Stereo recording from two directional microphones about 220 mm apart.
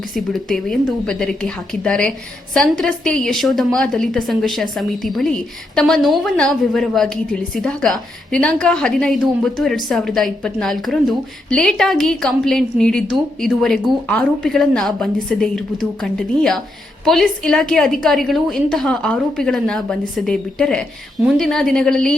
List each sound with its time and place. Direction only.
0.1 s a woman's voice: centre (ahead or behind)